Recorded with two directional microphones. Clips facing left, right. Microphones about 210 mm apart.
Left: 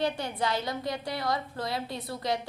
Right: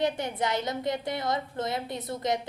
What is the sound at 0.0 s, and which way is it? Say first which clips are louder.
A woman's voice: right 1 dB; 20° right (ahead or behind).